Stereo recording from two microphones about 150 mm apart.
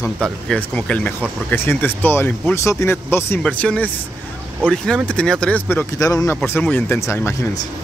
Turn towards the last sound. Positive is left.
turn(degrees=15)  # may be behind; listen again after turning